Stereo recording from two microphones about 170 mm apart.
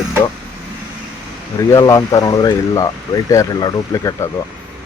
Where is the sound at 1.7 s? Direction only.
20° left (ahead or behind).